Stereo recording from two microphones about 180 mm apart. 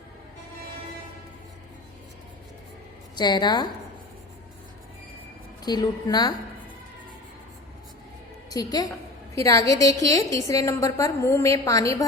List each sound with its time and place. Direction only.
3.2 s a woman's voice: 25° left (ahead or behind)
5.6 s a woman's voice: 20° left (ahead or behind)
8.4 s a woman's voice: 20° left (ahead or behind)